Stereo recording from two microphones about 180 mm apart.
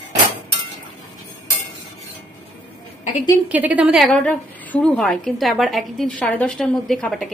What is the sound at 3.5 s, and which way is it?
A woman's voice, 10° right (ahead or behind).